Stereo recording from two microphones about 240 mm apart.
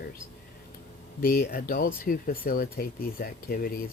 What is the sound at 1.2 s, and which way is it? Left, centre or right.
Speech, left.